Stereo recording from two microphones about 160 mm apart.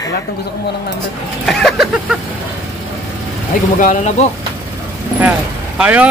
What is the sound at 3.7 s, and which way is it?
Speech, 55° left (ahead or behind).